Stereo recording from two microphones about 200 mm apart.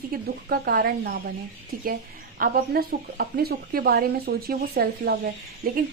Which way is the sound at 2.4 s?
45° right (ahead or behind).